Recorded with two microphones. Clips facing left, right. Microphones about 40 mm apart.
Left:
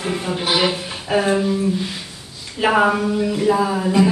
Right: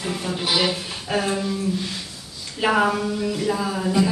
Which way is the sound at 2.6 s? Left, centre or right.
Centre.